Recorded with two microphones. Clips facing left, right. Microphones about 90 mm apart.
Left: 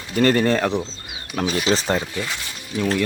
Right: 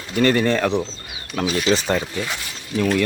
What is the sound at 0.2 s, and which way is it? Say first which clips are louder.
Speech: even; 35° left (ahead or behind).